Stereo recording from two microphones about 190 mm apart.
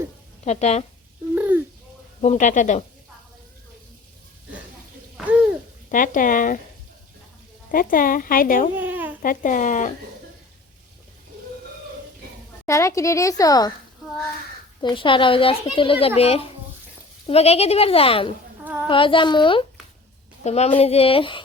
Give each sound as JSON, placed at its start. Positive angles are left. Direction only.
{"t": 0.4, "sound": "speech", "side_deg": 35}
{"t": 1.4, "sound": "a sound", "side_deg": -10}
{"t": 2.2, "sound": "speech", "side_deg": 40}
{"t": 5.1, "sound": "hoot", "side_deg": -5}
{"t": 5.9, "sound": "a woman's voice", "side_deg": 45}
{"t": 7.7, "sound": "a woman's voice", "side_deg": 45}
{"t": 8.7, "sound": "babbling", "side_deg": -10}
{"t": 9.2, "sound": "a woman's voice", "side_deg": 45}
{"t": 12.6, "sound": "a woman's voice", "side_deg": 15}
{"t": 14.8, "sound": "a child's voice", "side_deg": 25}
{"t": 18.6, "sound": "female singing", "side_deg": -10}
{"t": 18.9, "sound": "a child's voice", "side_deg": 25}